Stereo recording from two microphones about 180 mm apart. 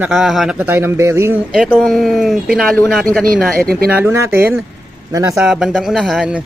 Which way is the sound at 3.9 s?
10° right (ahead or behind).